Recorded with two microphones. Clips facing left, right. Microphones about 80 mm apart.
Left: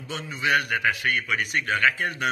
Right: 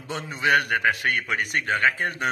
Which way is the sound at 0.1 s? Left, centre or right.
Right.